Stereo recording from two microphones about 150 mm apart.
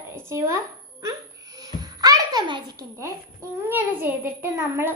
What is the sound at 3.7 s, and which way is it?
A child's voice, 10° right (ahead or behind).